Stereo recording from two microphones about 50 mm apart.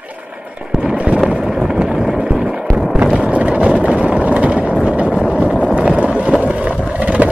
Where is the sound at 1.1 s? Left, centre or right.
Centre.